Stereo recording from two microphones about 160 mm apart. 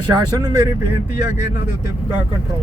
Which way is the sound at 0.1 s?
20° right (ahead or behind).